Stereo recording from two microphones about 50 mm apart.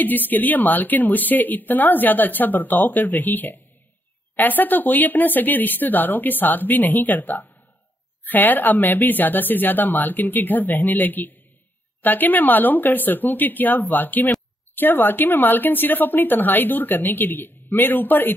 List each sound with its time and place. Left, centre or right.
0.0 s a woman's voice: left